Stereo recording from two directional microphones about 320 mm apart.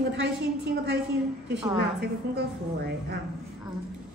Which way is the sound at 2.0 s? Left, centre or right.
Right.